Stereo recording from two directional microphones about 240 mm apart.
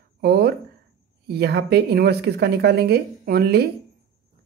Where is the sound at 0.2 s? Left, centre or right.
Right.